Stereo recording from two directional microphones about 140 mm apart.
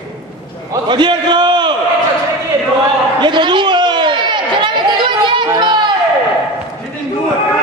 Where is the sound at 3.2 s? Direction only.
35° right (ahead or behind).